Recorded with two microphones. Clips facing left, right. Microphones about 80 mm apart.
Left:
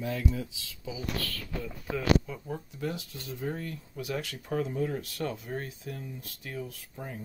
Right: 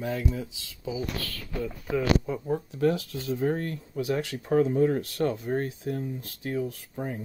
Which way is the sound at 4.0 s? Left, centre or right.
Right.